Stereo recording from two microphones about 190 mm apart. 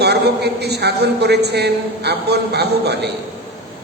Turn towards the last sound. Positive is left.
turn(degrees=-60)  # may be behind; listen again after turning